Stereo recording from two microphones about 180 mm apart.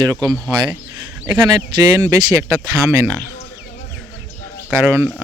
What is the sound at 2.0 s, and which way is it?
Speech, 15° right (ahead or behind).